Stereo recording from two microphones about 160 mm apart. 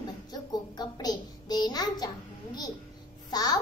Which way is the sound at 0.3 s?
25° left (ahead or behind).